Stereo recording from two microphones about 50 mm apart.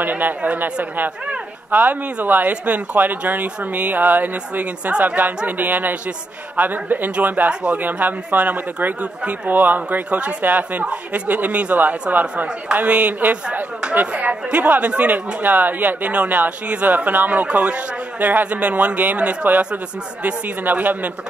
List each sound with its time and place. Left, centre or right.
0.0 s a man's voice: right